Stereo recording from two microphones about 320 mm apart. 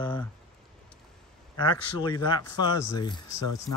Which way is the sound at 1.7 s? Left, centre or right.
Centre.